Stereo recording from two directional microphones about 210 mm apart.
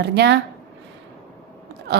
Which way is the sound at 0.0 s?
55° right (ahead or behind).